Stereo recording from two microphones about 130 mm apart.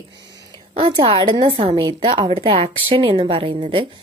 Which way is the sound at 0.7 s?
40° right (ahead or behind).